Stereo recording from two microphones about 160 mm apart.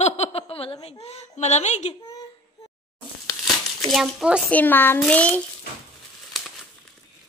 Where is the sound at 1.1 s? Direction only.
45° left (ahead or behind).